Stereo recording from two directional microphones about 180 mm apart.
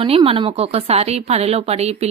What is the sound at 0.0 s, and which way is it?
A woman's voice, 30° right (ahead or behind).